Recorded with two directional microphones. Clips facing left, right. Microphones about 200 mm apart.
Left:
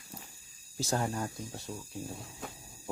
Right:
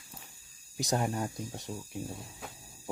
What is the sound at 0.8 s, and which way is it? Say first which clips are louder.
Speech: right 1 dB; 15° right (ahead or behind).